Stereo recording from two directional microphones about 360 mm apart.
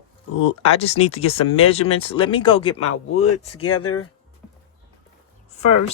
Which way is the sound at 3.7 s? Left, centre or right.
Left.